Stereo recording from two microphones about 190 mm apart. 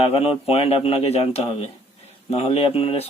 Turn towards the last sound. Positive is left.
turn(degrees=30)  # may be behind; listen again after turning